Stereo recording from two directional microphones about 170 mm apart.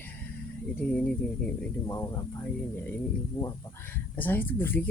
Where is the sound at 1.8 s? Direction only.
20° left (ahead or behind).